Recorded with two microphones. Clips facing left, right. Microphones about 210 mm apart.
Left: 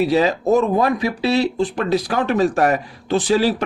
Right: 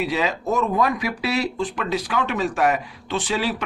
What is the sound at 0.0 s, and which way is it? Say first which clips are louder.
Speech: left 7 dB; 35° left (ahead or behind).